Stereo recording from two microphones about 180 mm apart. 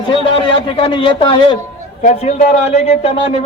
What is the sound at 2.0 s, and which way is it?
A man's voice, 40° left (ahead or behind).